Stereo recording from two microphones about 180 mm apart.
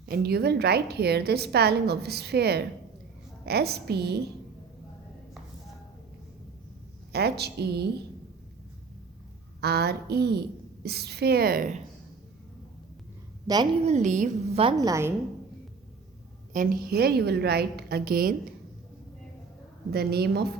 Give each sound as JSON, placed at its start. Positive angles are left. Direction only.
{"t": 0.0, "sound": "a woman's voice", "side_deg": -60}
{"t": 7.1, "sound": "a woman's voice", "side_deg": -65}
{"t": 9.6, "sound": "a woman's voice", "side_deg": -65}
{"t": 13.5, "sound": "a woman's voice", "side_deg": -20}
{"t": 13.8, "sound": "a woman's voice", "side_deg": -40}
{"t": 14.6, "sound": "a woman's voice", "side_deg": -25}
{"t": 16.5, "sound": "a woman's voice", "side_deg": -50}
{"t": 19.9, "sound": "a woman's voice", "side_deg": -60}